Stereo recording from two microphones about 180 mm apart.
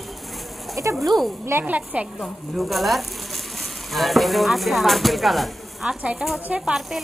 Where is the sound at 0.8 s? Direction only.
15° right (ahead or behind).